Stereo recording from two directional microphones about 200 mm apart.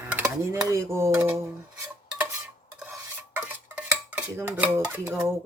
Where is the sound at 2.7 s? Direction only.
10° right (ahead or behind).